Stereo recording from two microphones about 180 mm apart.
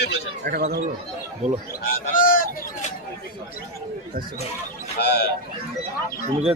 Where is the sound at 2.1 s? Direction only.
50° left (ahead or behind).